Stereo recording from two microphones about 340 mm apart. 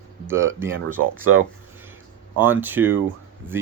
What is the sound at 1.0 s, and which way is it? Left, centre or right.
Speech, right.